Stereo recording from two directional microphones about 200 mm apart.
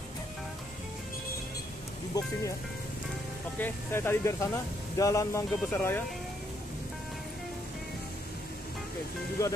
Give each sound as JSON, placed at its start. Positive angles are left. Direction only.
{"t": 2.1, "sound": "speech", "side_deg": 20}
{"t": 3.5, "sound": "speech", "side_deg": 10}